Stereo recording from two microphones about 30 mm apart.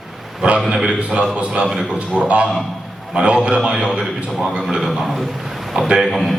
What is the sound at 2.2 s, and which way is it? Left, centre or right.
A man's voice, right.